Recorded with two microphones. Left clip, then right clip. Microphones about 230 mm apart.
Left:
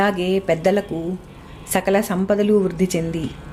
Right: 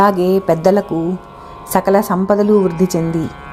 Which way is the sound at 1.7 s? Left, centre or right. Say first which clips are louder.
Right 6 dB; centre.